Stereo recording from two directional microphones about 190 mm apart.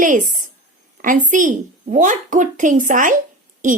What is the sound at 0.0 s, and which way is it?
A woman's voice, 45° right (ahead or behind).